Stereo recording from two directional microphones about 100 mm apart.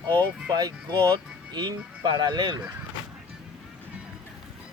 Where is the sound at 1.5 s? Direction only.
45° right (ahead or behind).